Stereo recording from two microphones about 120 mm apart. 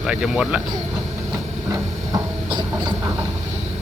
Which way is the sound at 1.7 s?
35° right (ahead or behind).